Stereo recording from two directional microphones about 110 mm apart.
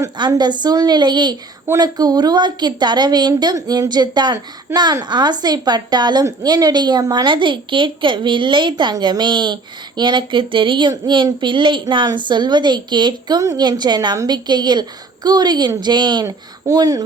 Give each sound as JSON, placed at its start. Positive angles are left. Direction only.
{"t": 0.2, "sound": "a woman's voice", "side_deg": -40}
{"t": 16.2, "sound": "a woman's voice", "side_deg": -30}